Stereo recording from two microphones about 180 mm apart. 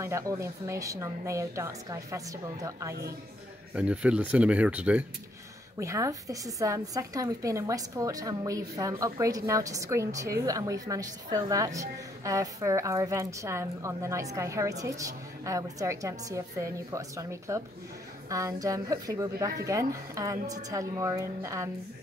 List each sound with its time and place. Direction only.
0.0 s a woman's voice: 15° right (ahead or behind)
3.7 s a woman's voice: 5° right (ahead or behind)